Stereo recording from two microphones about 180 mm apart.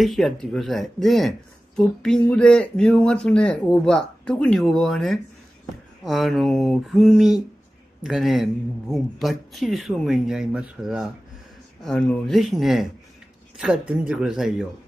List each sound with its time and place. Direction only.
0.0 s speech: centre (ahead or behind)